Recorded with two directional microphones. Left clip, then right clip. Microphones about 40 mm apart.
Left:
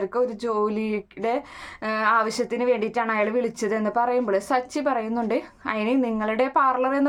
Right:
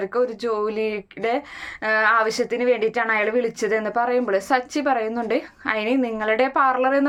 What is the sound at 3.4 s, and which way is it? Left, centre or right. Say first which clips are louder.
A woman's voice: right 3 dB; left.